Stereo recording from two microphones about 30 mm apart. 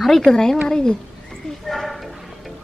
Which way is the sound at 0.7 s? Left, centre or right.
Left.